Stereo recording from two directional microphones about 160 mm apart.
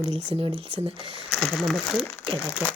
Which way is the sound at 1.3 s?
5° right (ahead or behind).